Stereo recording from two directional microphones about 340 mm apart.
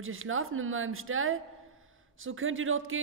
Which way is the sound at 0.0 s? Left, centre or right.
Right.